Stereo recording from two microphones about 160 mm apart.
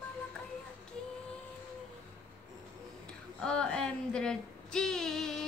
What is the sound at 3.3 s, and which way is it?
Female singing, 5° left (ahead or behind).